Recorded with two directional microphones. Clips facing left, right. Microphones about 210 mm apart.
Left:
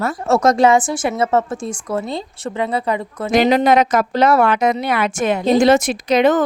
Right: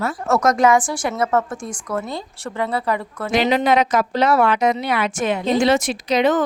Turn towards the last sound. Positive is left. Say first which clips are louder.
# left 3 dB
turn(degrees=50)  # may be behind; listen again after turning